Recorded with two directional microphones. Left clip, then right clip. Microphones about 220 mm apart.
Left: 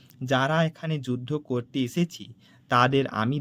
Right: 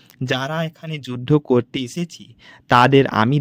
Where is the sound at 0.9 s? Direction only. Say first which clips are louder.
Right 16 dB; 35° right (ahead or behind).